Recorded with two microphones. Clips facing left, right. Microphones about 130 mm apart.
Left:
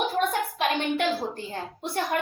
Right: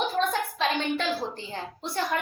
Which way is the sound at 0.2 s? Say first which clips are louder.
Left 1 dB; 15° left (ahead or behind).